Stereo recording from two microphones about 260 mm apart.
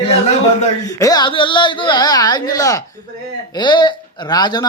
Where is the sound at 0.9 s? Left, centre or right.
Centre.